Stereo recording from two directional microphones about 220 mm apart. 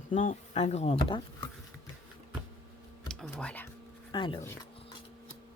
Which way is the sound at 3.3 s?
5° left (ahead or behind).